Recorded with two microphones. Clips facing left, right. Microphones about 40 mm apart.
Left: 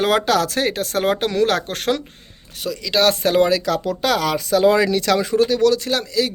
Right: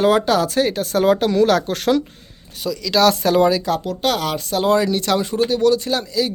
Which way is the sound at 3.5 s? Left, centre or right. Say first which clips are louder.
Right 1 dB; left.